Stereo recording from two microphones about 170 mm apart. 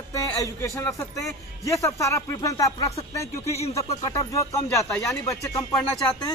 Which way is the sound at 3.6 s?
40° left (ahead or behind).